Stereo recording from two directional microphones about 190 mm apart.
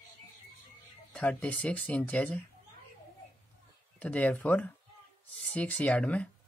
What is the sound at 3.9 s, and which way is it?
Speech, 10° left (ahead or behind).